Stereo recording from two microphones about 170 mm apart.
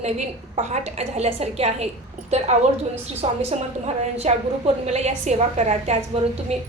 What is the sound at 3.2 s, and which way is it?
A woman's voice, 35° right (ahead or behind).